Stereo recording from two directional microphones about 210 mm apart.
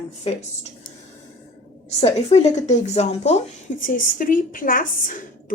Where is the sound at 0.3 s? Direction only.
30° left (ahead or behind).